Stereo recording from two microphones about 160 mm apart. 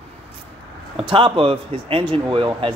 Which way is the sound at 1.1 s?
30° right (ahead or behind).